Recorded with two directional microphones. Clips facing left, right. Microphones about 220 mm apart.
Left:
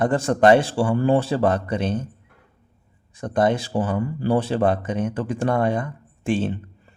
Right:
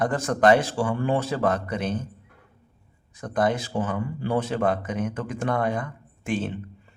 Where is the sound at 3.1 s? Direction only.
30° left (ahead or behind).